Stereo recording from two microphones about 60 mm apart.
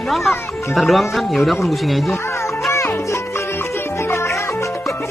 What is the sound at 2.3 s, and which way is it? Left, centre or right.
Music, left.